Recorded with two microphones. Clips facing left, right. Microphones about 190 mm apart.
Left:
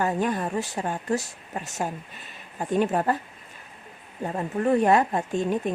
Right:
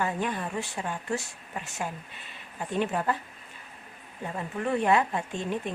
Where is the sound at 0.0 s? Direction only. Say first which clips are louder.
Left 5 dB; 40° left (ahead or behind).